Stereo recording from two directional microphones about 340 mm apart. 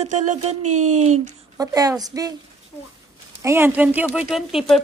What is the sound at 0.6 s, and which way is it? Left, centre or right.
Speech, right.